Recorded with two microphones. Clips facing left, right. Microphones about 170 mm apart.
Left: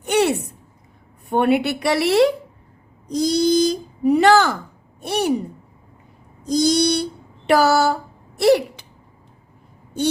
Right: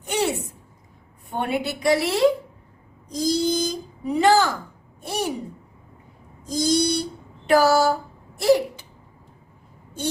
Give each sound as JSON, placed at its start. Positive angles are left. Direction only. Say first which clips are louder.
{"t": 0.0, "sound": "a sound", "louder": "left 6 dB", "side_deg": 70}
{"t": 1.3, "sound": "speech", "louder": "left 8 dB", "side_deg": 70}
{"t": 6.5, "sound": "speech", "louder": "left 4 dB", "side_deg": 75}